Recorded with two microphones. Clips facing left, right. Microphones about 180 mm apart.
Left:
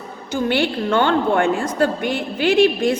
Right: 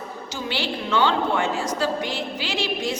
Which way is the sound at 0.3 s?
55° left (ahead or behind).